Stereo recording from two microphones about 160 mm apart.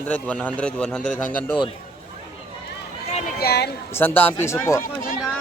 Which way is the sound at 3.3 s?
80° left.